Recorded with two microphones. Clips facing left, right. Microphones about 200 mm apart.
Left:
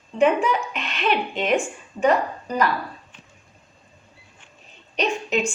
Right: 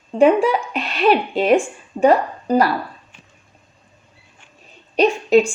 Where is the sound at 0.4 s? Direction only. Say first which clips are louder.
Right 5 dB; 35° right (ahead or behind).